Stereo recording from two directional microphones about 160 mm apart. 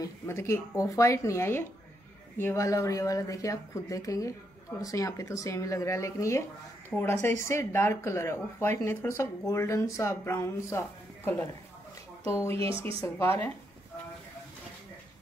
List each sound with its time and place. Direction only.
0.0 s speech: 15° left (ahead or behind)
12.3 s speech: 15° left (ahead or behind)